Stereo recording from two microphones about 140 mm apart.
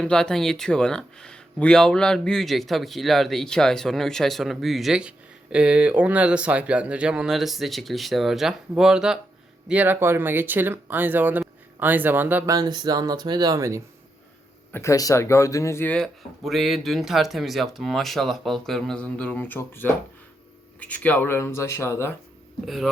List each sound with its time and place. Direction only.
0.0 s speech: 5° left (ahead or behind); by 12.5 s 15° right (ahead or behind)
12.5 s speech: 30° right (ahead or behind)
14.7 s speech: 20° left (ahead or behind)
16.4 s speech: centre (ahead or behind); by 22.1 s 20° left (ahead or behind)
22.6 s speech: centre (ahead or behind)